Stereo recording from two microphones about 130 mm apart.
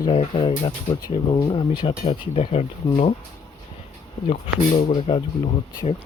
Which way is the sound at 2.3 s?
50° left (ahead or behind).